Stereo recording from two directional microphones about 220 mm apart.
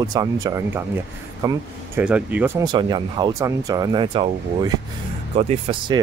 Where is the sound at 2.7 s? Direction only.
20° right (ahead or behind).